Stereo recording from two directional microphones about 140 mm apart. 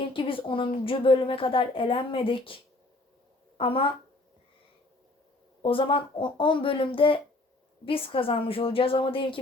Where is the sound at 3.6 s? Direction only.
40° left (ahead or behind).